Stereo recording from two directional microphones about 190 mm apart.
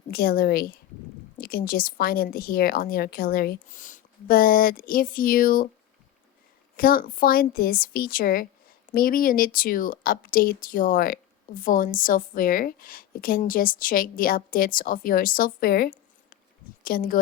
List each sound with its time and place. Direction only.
0.1 s a woman's voice: 55° left (ahead or behind)
6.7 s a woman's voice: 50° left (ahead or behind)